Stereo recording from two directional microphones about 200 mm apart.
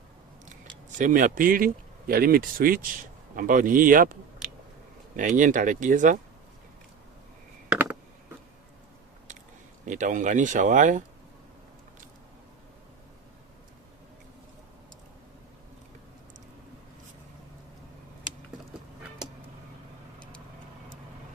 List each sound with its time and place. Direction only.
0.9 s speech: 40° right (ahead or behind)
7.7 s a sound: 5° right (ahead or behind)
9.8 s speech: 40° right (ahead or behind)